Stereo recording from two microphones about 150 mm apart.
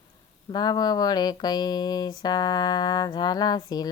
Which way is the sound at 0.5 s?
25° left (ahead or behind).